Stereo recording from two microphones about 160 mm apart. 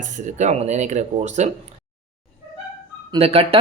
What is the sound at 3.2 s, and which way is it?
Speech, 40° right (ahead or behind).